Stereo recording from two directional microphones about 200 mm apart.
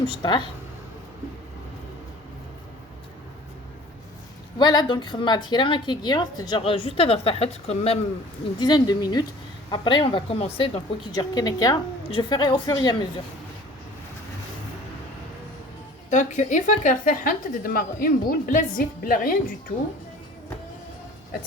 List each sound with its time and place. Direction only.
0.1 s a woman's voice: 25° left (ahead or behind)
4.5 s a woman's voice: 20° left (ahead or behind)
11.1 s a woman's voice: 20° left (ahead or behind)
16.0 s a woman's voice: 35° left (ahead or behind)